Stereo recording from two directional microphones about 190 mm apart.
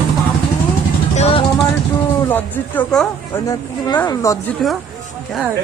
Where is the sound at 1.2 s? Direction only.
30° left (ahead or behind).